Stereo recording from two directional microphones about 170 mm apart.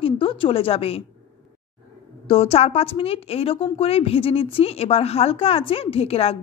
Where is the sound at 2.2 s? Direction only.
35° left (ahead or behind).